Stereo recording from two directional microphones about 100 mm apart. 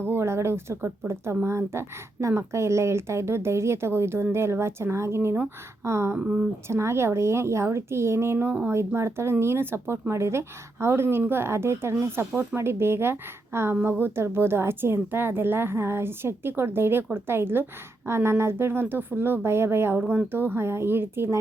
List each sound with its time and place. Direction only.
0.0 s speech: 25° right (ahead or behind)
6.1 s speech: 15° right (ahead or behind)
6.7 s speech: 25° right (ahead or behind)